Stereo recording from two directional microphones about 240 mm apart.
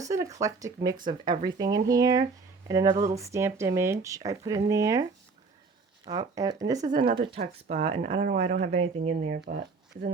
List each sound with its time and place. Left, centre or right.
0.0 s speech: centre
6.1 s speech: centre
8.2 s speech: right